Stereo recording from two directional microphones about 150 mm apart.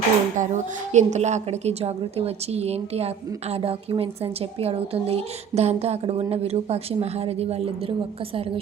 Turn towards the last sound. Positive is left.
turn(degrees=-45)  # may be behind; listen again after turning